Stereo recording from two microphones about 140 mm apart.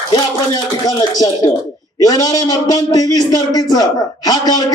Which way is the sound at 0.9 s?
30° left (ahead or behind).